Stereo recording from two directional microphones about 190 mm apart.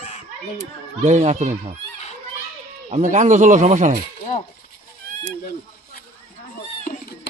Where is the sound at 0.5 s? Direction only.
35° right (ahead or behind).